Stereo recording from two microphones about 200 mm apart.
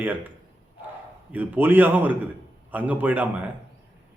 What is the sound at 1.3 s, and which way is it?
A man's voice, 10° right (ahead or behind).